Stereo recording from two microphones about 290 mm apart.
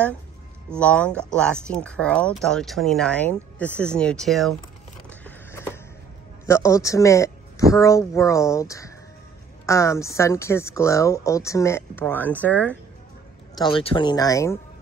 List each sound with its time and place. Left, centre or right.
0.7 s speech: centre
5.2 s a sound: centre
6.4 s speech: centre
13.6 s speech: centre